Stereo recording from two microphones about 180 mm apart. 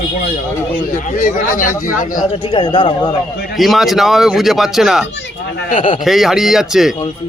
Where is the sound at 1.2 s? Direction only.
50° left (ahead or behind).